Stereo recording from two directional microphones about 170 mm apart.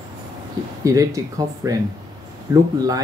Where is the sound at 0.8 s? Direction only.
20° right (ahead or behind).